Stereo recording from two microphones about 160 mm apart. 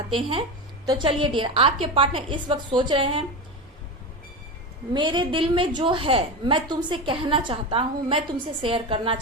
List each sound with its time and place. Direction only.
0.1 s a woman's voice: 35° right (ahead or behind)
4.9 s a woman's voice: 30° right (ahead or behind)